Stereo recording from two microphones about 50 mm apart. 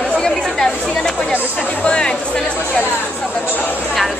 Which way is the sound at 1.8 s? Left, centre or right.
Centre.